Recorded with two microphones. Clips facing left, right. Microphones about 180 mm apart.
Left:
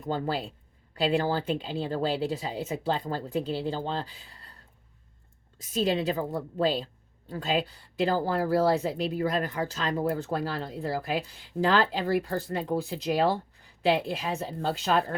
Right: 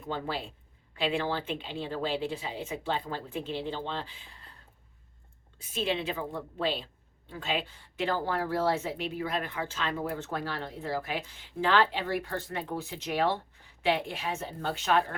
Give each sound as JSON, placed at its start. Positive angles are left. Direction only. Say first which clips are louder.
{"t": 0.0, "sound": "speech", "louder": "left 5 dB", "side_deg": 40}
{"t": 5.5, "sound": "speech", "louder": "left 5 dB", "side_deg": 40}